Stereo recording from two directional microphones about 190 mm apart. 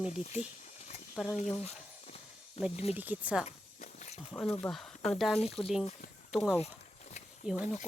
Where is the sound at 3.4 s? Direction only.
35° left (ahead or behind).